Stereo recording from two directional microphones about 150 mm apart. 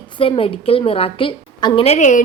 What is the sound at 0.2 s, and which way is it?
A woman's voice, 40° left (ahead or behind).